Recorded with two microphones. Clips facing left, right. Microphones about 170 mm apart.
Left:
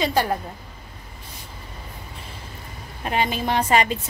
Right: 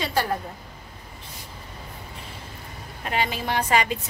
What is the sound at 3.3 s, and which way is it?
Speech, 20° left (ahead or behind).